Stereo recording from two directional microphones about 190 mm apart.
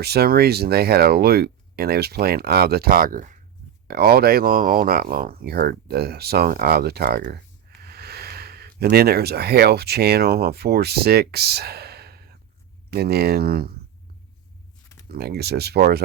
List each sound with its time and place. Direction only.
0.0 s speech: 55° right (ahead or behind)
15.1 s speech: 55° right (ahead or behind)